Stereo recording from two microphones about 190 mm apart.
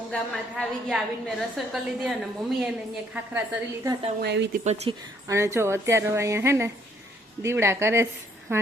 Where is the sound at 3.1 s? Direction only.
10° right (ahead or behind).